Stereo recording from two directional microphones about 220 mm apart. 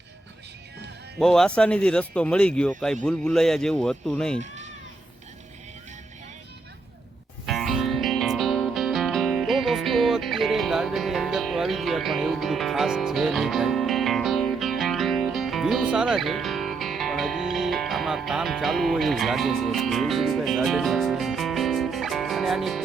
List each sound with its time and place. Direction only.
1.2 s speech: centre (ahead or behind)
4.4 s cat: 30° right (ahead or behind)
7.4 s music: centre (ahead or behind)